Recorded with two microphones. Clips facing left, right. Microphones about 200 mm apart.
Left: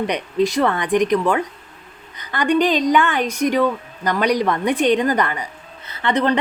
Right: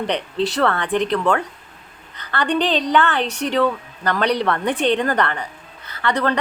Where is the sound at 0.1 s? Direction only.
10° left (ahead or behind).